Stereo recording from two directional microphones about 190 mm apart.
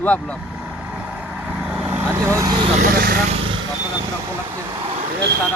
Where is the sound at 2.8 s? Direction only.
55° right (ahead or behind).